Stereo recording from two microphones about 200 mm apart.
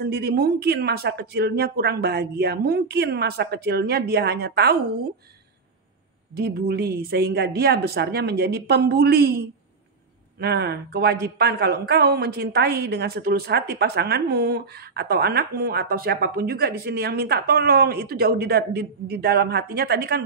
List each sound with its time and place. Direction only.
0.0 s a woman's voice: 55° right (ahead or behind)
6.3 s a woman's voice: 50° right (ahead or behind)
10.4 s a woman's voice: 55° right (ahead or behind)